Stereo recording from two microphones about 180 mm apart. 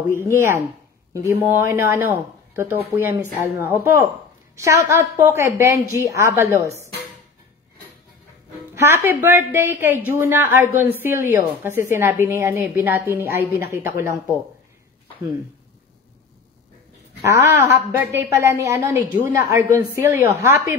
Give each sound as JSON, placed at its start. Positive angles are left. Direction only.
{"t": 0.1, "sound": "a woman's voice", "side_deg": -15}
{"t": 8.7, "sound": "a woman's voice", "side_deg": -15}
{"t": 17.2, "sound": "a woman's voice", "side_deg": -15}